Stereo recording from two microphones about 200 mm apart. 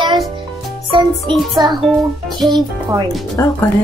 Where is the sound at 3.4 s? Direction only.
15° left (ahead or behind).